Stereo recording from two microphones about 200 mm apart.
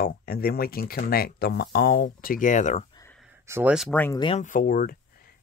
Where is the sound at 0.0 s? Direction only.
50° left (ahead or behind).